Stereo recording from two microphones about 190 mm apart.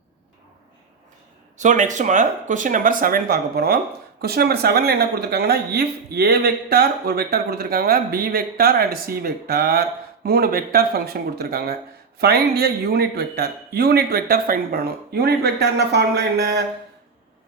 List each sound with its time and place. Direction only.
1.5 s a man's voice: 40° right (ahead or behind); by 16.6 s 60° right (ahead or behind)